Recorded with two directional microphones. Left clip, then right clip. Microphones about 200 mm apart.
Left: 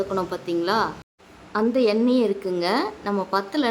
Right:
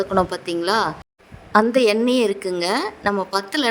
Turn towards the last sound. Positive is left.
turn(degrees=-35)  # may be behind; listen again after turning